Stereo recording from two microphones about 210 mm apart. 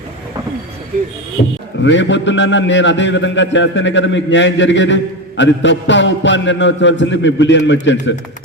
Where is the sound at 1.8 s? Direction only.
60° left (ahead or behind).